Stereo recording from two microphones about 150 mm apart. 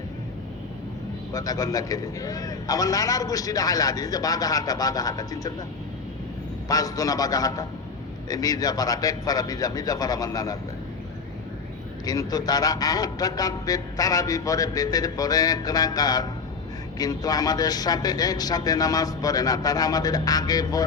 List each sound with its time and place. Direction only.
1.3 s a man's voice: 20° left (ahead or behind)
6.7 s a man's voice: 25° left (ahead or behind)
12.0 s a man's voice: 25° left (ahead or behind)